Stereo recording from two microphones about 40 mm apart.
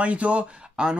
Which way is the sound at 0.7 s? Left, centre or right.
Right.